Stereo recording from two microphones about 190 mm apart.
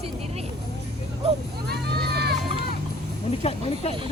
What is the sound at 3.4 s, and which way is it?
Speech, 30° left (ahead or behind).